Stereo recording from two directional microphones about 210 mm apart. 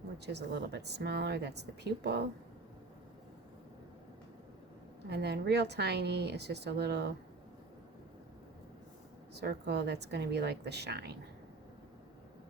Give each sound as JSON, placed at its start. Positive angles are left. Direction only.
{"t": 0.3, "sound": "a woman's voice", "side_deg": -55}
{"t": 5.0, "sound": "a woman's voice", "side_deg": -50}
{"t": 9.3, "sound": "a woman's voice", "side_deg": -50}